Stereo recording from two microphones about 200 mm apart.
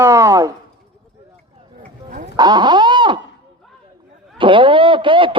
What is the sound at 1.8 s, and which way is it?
Dog, 45° right (ahead or behind).